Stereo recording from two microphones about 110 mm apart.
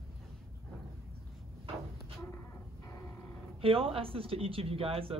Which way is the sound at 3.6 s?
60° right (ahead or behind).